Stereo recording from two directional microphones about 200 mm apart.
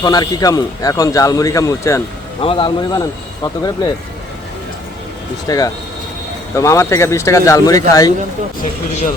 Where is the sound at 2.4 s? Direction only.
25° left (ahead or behind).